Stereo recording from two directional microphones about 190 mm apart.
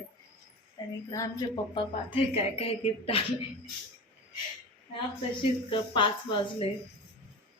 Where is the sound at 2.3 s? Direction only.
30° left (ahead or behind).